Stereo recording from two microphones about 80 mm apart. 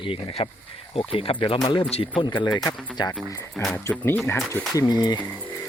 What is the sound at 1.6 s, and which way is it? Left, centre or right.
Speech, left.